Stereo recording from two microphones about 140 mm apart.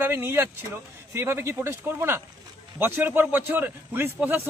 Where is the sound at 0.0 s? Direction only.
15° right (ahead or behind).